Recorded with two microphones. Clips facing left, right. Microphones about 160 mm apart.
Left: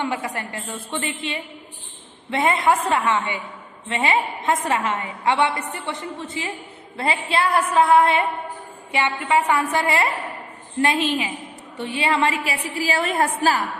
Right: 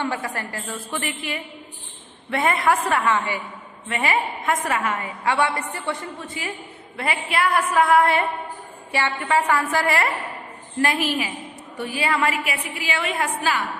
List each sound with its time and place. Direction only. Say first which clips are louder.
0.0 s a woman's voice: left 1 dB; 20° left (ahead or behind); by 13.6 s 40° left (ahead or behind)